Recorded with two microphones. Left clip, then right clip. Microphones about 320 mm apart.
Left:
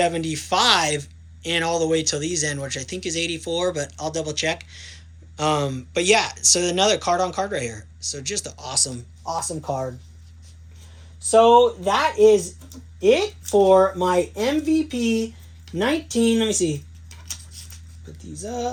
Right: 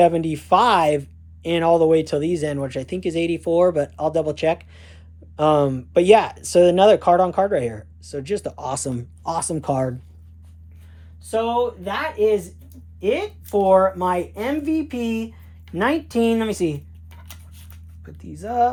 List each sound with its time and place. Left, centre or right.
0.0 s speech: centre; by 9.9 s right
11.3 s speech: centre
13.5 s speech: centre
17.6 s a sound: centre
18.4 s speech: centre